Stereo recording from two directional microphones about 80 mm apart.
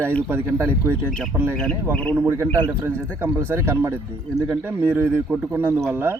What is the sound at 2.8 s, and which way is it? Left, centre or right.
Speech, right.